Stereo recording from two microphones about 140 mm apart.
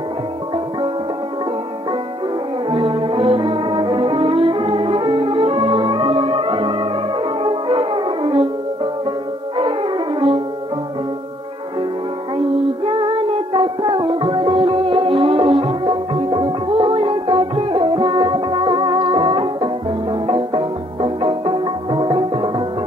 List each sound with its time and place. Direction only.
2.7 s brass instrument: 40° right (ahead or behind)
7.4 s music: 40° right (ahead or behind)
9.6 s music: 35° right (ahead or behind)
12.4 s child singing: 40° right (ahead or behind)